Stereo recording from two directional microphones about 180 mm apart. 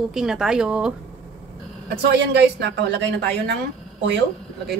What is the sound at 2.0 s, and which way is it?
Speech, 70° right (ahead or behind).